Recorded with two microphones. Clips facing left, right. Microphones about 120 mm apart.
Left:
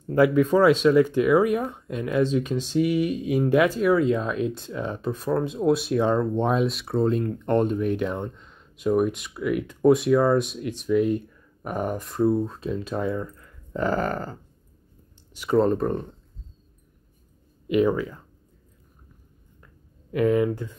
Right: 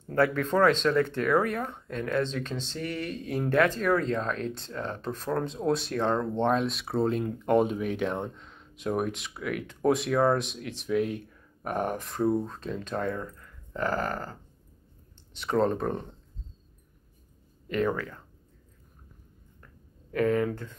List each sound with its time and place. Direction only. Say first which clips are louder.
0.0 s speech: left 7 dB; 10° left (ahead or behind)
13.7 s a sound: left 5 dB; 20° left (ahead or behind)
15.4 s speech: left 5 dB; 5° left (ahead or behind)
17.6 s speech: left 7 dB; 10° left (ahead or behind)
20.1 s speech: left 4 dB; 15° left (ahead or behind)